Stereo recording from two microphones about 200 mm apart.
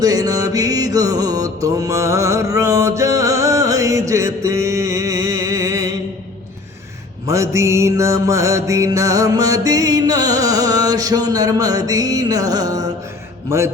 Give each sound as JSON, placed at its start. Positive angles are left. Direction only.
{"t": 0.0, "sound": "mantra", "side_deg": -20}
{"t": 7.3, "sound": "music", "side_deg": -15}